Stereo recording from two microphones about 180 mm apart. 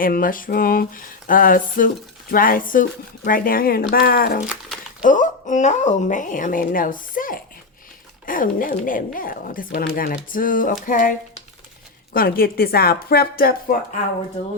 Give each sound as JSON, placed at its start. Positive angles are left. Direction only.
{"t": 0.0, "sound": "a woman's voice", "side_deg": 50}
{"t": 4.4, "sound": "crumpling", "side_deg": -5}
{"t": 5.0, "sound": "a woman's voice", "side_deg": 45}
{"t": 12.1, "sound": "speech", "side_deg": 55}